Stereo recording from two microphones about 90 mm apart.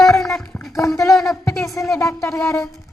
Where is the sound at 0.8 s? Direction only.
35° left (ahead or behind).